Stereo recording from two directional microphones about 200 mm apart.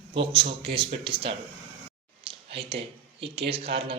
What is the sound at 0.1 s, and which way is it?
Speech, 25° right (ahead or behind).